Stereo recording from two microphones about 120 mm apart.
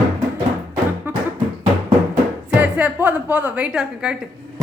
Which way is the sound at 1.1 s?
15° right (ahead or behind).